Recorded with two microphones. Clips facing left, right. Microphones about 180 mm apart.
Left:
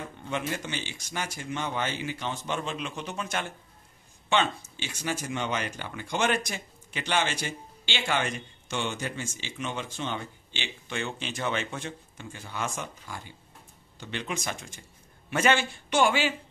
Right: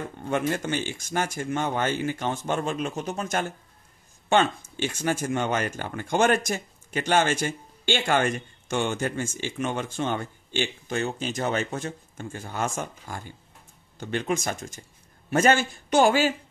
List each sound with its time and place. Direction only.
0.2 s a man's voice: 50° right (ahead or behind)